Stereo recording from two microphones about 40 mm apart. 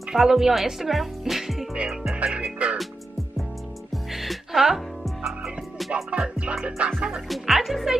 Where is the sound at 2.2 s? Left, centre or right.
Right.